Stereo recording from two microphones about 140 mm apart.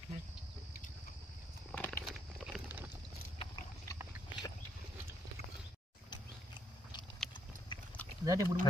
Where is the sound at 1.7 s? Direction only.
15° left (ahead or behind).